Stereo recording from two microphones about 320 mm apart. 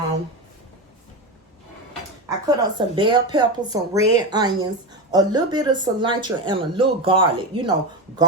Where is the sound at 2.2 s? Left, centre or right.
Centre.